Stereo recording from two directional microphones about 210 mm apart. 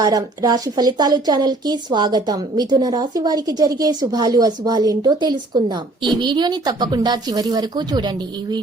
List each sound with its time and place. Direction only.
0.0 s a woman's voice: 20° right (ahead or behind)